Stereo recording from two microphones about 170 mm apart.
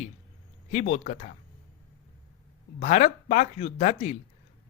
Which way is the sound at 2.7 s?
45° left (ahead or behind).